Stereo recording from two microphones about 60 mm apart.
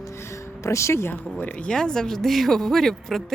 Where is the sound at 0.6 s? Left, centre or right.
Left.